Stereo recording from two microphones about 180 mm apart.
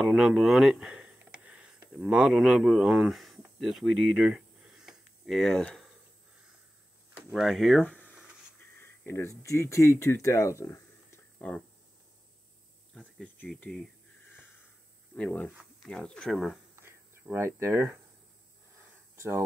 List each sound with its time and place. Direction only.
0.0 s speech: 5° right (ahead or behind)
7.2 s speech: 5° right (ahead or behind)
8.7 s a sound: 15° left (ahead or behind)
9.4 s speech: 15° left (ahead or behind)
12.9 s speech: 5° left (ahead or behind)
15.1 s speech: 10° left (ahead or behind)
16.8 s a sound: 15° right (ahead or behind)